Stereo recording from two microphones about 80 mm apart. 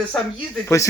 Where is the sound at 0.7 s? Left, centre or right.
Left.